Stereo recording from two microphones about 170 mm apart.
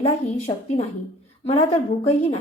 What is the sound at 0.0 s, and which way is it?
A woman's voice, 35° left (ahead or behind).